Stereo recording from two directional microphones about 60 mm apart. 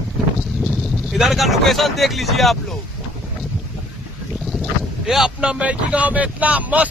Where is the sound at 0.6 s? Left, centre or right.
Centre.